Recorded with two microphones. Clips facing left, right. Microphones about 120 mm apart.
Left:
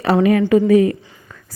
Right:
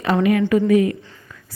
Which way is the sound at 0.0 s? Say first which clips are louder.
Left 3 dB; 35° left (ahead or behind).